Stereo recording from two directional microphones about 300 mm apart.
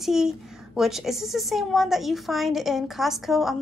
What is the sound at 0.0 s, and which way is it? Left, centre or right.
A woman's voice, centre.